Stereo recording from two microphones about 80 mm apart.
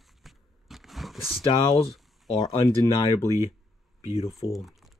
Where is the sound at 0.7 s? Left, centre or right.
Centre.